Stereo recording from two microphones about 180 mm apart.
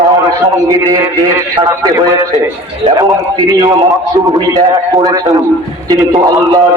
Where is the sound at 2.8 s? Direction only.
25° right (ahead or behind).